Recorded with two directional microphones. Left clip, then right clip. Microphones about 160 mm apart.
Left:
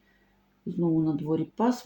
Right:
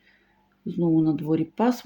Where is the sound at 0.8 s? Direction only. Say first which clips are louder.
Right 4 dB; 40° right (ahead or behind).